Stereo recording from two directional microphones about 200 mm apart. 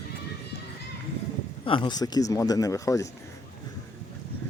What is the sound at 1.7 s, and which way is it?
A man's voice, 25° left (ahead or behind).